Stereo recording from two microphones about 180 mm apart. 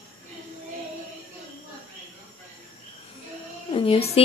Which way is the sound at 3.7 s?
30° left (ahead or behind).